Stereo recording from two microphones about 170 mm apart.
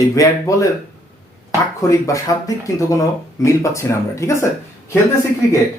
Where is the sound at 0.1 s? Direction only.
20° left (ahead or behind).